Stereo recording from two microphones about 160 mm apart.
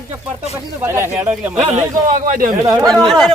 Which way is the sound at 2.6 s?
20° right (ahead or behind).